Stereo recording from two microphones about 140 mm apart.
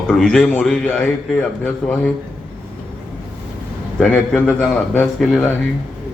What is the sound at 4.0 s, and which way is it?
Speech, 10° left (ahead or behind).